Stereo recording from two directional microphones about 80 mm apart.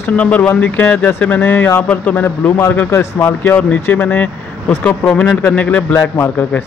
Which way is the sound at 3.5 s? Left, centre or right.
Centre.